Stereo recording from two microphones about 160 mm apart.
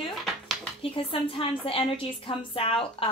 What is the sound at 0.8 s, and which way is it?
Speech, 35° left (ahead or behind).